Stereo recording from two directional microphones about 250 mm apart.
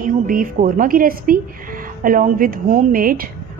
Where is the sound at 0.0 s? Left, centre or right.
Right.